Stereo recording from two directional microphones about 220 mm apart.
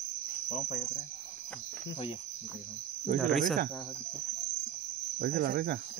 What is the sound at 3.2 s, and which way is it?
Speech, centre (ahead or behind).